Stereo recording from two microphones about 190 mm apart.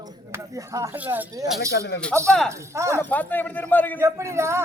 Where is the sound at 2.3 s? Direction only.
5° left (ahead or behind).